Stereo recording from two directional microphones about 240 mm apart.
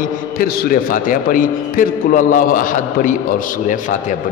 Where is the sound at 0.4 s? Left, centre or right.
Left.